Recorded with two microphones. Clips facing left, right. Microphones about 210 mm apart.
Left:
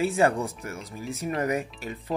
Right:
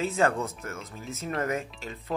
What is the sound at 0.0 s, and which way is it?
Speech, 15° left (ahead or behind).